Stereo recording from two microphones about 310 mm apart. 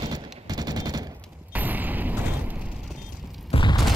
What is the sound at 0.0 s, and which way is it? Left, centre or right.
Machine gun, centre.